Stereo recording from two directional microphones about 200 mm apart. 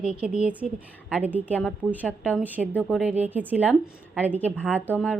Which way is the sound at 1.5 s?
5° left (ahead or behind).